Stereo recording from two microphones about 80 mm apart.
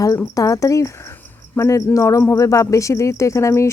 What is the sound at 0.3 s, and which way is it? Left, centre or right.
Speech, left.